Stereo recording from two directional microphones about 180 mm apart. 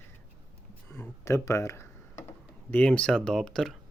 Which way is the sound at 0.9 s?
15° left (ahead or behind).